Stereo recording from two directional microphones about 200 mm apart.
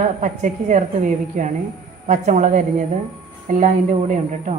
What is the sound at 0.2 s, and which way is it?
A woman's voice, 40° right (ahead or behind).